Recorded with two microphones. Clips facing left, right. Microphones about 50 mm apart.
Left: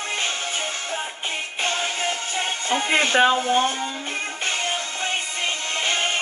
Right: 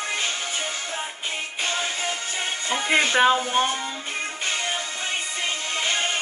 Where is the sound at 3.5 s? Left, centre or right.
Right.